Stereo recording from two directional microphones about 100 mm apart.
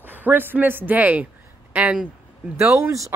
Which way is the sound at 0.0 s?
20° right (ahead or behind).